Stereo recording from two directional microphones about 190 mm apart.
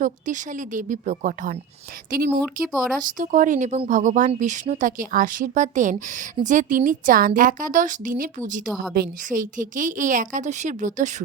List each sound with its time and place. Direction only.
0.0 s a woman's voice: 40° right (ahead or behind)
2.4 s speech: centre (ahead or behind)
3.0 s a woman's voice: 45° right (ahead or behind)